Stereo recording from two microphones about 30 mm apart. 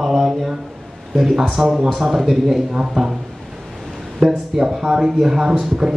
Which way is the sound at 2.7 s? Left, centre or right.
Right.